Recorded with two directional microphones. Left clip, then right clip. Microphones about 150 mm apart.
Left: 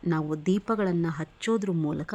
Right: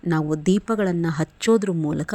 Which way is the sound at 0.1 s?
25° right (ahead or behind).